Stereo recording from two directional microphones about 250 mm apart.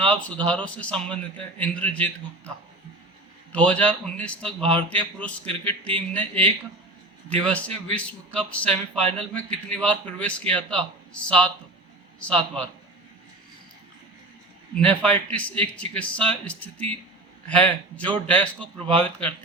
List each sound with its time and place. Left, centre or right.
0.0 s a man's voice: centre
3.5 s a man's voice: centre
14.8 s a man's voice: centre